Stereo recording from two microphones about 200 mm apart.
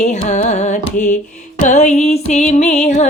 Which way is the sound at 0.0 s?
35° left (ahead or behind).